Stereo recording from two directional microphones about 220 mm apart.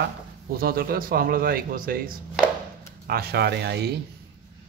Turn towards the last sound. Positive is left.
turn(degrees=-50)  # may be behind; listen again after turning